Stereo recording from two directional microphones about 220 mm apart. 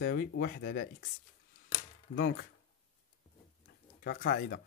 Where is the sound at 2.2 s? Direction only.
50° left (ahead or behind).